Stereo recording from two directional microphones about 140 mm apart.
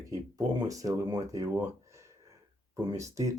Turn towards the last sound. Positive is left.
turn(degrees=-20)  # may be behind; listen again after turning